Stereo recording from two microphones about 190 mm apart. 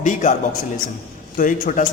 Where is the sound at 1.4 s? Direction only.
45° left (ahead or behind).